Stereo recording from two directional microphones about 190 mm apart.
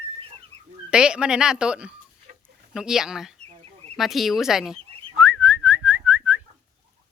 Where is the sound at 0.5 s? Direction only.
35° right (ahead or behind).